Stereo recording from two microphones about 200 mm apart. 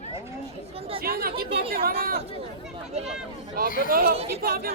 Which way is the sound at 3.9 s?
45° right (ahead or behind).